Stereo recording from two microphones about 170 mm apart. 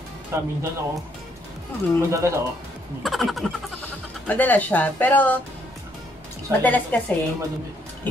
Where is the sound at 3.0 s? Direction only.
Centre (ahead or behind).